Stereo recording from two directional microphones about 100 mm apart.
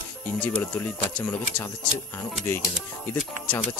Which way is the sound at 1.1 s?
20° left (ahead or behind).